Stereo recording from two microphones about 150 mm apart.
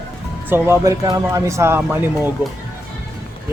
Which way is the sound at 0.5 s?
15° right (ahead or behind).